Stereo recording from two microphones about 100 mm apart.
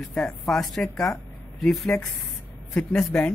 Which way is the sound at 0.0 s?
5° left (ahead or behind).